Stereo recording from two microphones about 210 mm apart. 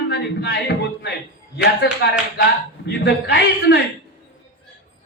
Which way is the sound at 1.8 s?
55° left (ahead or behind).